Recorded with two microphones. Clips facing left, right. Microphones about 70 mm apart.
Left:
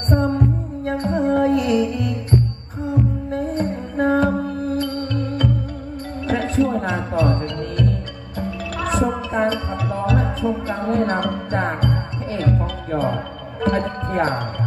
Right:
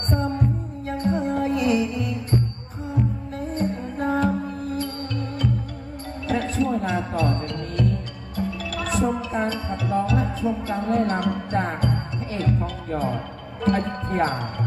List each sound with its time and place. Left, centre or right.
0.1 s music: left
3.3 s music: left
6.2 s music: left